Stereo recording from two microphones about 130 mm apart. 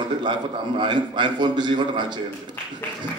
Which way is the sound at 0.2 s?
35° right (ahead or behind).